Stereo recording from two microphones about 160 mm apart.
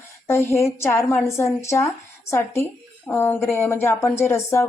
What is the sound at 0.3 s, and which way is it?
Speech, 15° left (ahead or behind).